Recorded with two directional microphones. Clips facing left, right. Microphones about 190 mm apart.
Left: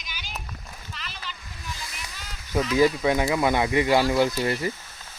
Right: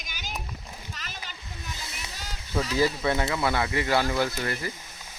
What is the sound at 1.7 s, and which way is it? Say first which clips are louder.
Music: left 3 dB; 20° right (ahead or behind).